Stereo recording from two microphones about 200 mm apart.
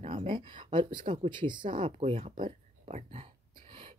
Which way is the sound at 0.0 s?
30° right (ahead or behind).